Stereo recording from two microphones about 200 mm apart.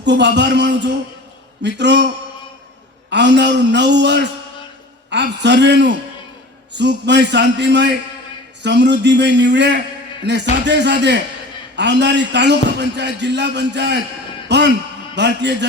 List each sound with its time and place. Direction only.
0.0 s a man's voice: 60° right (ahead or behind)
14.4 s a sound: 60° right (ahead or behind)
15.1 s a man's voice: 60° right (ahead or behind)